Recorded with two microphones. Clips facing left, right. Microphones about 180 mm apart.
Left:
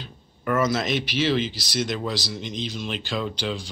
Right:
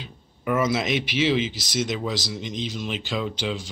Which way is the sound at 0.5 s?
10° right (ahead or behind).